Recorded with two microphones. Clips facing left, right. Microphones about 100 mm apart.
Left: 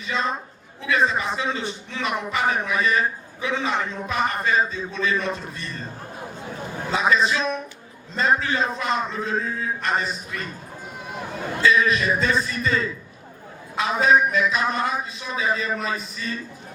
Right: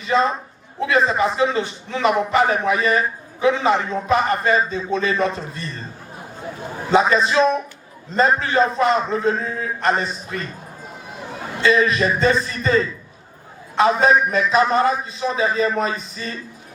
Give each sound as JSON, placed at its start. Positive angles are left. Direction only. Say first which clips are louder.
{"t": 0.1, "sound": "a man's voice", "louder": "right 8 dB", "side_deg": -40}
{"t": 6.9, "sound": "a man's voice", "louder": "right 5 dB", "side_deg": -40}
{"t": 11.6, "sound": "a man's voice", "louder": "right 3 dB", "side_deg": -35}